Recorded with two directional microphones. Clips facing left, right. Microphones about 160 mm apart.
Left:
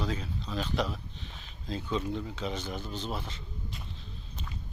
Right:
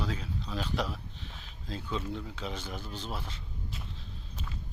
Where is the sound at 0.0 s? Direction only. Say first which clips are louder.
Left 2 dB; 5° right (ahead or behind).